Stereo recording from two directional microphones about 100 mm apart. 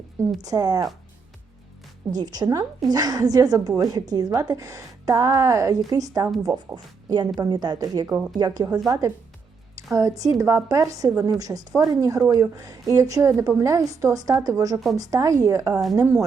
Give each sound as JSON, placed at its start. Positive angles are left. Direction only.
{"t": 0.4, "sound": "a woman's voice", "side_deg": -40}
{"t": 2.0, "sound": "a woman's voice", "side_deg": -40}